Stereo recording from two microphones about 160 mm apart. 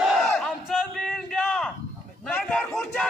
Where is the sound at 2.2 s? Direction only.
5° left (ahead or behind).